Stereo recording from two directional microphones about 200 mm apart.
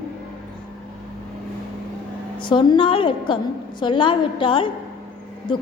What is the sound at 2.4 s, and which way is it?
A woman's voice, 25° left (ahead or behind).